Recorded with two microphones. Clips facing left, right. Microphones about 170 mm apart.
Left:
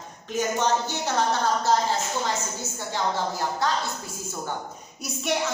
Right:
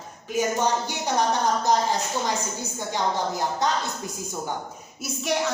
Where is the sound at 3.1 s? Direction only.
20° right (ahead or behind).